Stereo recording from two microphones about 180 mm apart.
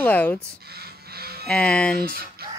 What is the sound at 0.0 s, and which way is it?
Speech, 10° left (ahead or behind).